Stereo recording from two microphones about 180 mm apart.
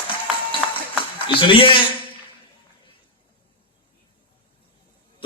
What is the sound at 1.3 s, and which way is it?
Speech, 30° left (ahead or behind).